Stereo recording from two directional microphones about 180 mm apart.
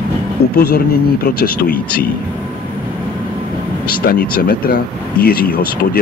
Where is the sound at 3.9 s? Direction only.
55° left (ahead or behind).